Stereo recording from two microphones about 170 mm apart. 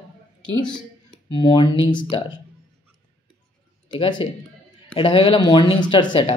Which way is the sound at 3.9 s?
30° left (ahead or behind).